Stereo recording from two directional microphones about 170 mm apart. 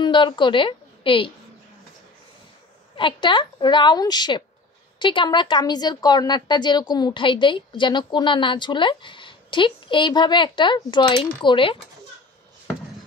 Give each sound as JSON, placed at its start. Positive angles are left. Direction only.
{"t": 0.0, "sound": "a woman's voice", "side_deg": 30}
{"t": 3.0, "sound": "speech", "side_deg": 30}